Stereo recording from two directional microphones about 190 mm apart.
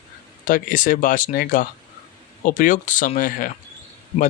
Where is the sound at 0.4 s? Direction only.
45° left (ahead or behind).